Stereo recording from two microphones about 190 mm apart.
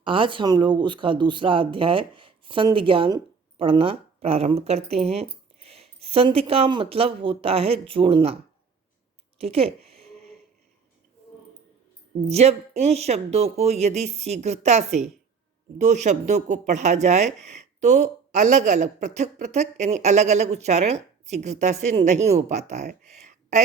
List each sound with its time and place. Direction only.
0.0 s speech: 25° right (ahead or behind)
9.4 s a sound: 30° right (ahead or behind)
12.3 s speech: 35° right (ahead or behind)